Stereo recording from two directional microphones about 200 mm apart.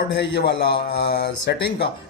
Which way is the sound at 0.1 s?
55° left (ahead or behind).